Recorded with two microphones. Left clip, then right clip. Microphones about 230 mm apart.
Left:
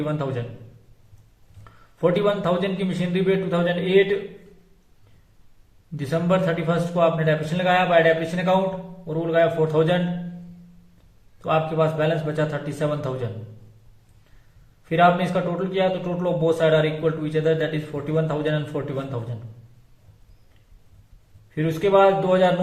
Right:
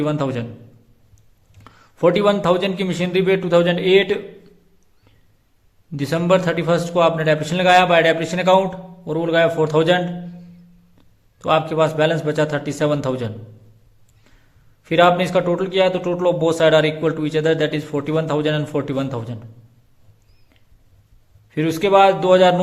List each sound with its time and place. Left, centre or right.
0.0 s a man's voice: right
1.6 s a man's voice: right
6.0 s a man's voice: right
11.3 s a man's voice: right
14.8 s a man's voice: right
21.5 s a man's voice: right